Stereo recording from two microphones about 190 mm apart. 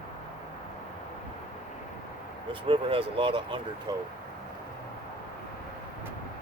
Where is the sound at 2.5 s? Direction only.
25° right (ahead or behind).